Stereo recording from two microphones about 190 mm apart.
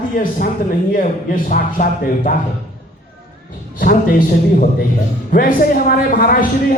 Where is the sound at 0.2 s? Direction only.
50° left (ahead or behind).